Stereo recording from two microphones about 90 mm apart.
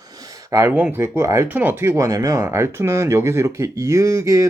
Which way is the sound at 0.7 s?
20° right (ahead or behind).